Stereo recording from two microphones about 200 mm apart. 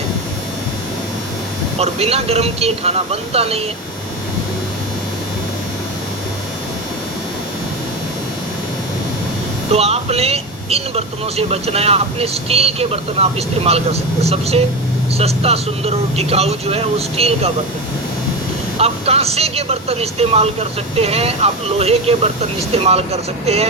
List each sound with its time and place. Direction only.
1.8 s speech: 30° right (ahead or behind)
9.7 s speech: 30° right (ahead or behind)
18.8 s speech: 30° right (ahead or behind)